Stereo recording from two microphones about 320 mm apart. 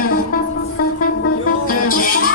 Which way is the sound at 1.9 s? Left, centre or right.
Left.